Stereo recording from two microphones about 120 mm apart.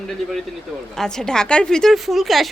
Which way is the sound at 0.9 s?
5° left (ahead or behind).